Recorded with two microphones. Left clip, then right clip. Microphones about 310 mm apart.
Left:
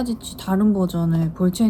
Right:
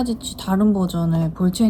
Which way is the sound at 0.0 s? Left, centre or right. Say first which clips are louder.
Right 2 dB; centre.